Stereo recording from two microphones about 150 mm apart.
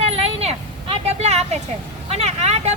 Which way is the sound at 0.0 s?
40° right (ahead or behind).